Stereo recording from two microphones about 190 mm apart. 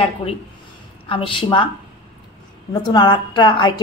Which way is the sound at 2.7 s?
25° left (ahead or behind).